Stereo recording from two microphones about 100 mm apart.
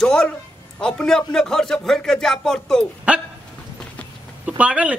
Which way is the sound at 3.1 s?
15° right (ahead or behind).